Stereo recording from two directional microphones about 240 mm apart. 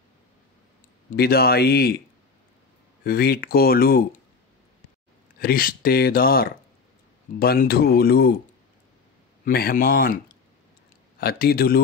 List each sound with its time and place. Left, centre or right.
1.1 s speech: left
5.4 s speech: left
9.4 s speech: left